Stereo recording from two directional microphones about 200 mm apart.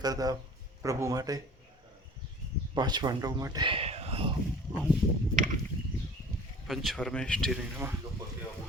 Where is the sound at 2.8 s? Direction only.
20° right (ahead or behind).